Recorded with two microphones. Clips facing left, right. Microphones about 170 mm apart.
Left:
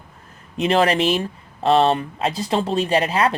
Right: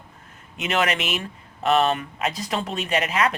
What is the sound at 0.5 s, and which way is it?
Speech, 35° left (ahead or behind).